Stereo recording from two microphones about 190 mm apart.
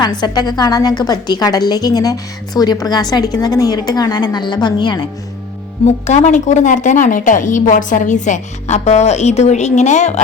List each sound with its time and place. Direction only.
0.0 s a woman's voice: 20° left (ahead or behind)
5.8 s speech: 35° left (ahead or behind)